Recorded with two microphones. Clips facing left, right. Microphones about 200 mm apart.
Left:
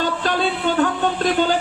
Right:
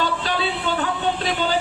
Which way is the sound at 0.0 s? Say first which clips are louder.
Left 3 dB; 50° left (ahead or behind).